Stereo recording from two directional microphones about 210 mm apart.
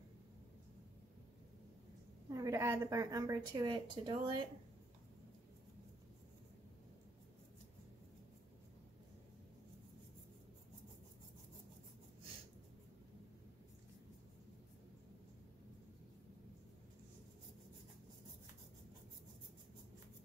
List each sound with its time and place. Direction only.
2.2 s a woman's voice: 15° right (ahead or behind)